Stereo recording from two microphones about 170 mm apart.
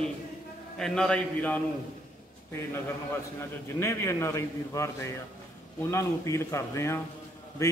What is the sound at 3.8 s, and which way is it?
A man's voice, 15° left (ahead or behind).